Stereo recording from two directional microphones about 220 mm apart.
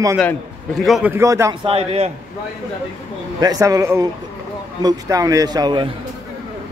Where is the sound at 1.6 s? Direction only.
25° right (ahead or behind).